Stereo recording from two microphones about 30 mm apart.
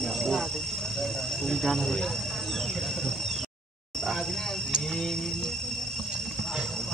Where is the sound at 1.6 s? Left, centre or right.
Centre.